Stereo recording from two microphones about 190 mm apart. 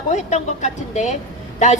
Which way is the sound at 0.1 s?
40° left (ahead or behind).